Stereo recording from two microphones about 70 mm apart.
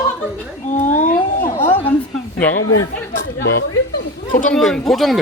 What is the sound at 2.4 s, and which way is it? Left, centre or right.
Speech, left.